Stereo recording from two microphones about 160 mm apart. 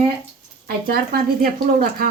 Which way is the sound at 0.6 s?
65° right (ahead or behind).